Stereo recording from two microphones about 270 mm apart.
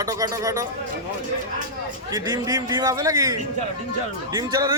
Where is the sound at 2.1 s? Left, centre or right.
Centre.